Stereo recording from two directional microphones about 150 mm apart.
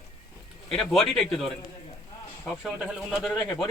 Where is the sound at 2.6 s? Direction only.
Centre (ahead or behind).